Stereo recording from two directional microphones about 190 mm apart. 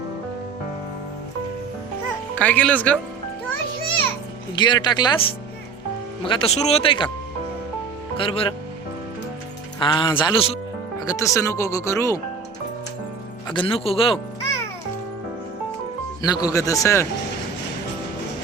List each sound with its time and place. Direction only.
2.4 s speech: 5° left (ahead or behind)
4.5 s speech: 25° left (ahead or behind)
8.1 s speech: 30° left (ahead or behind)
9.8 s speech: 25° left (ahead or behind)
11.0 s speech: 15° left (ahead or behind)
13.5 s speech: 25° left (ahead or behind)
16.2 s speech: 20° left (ahead or behind)